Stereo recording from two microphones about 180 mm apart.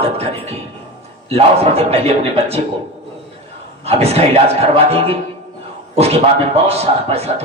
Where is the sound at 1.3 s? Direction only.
35° right (ahead or behind).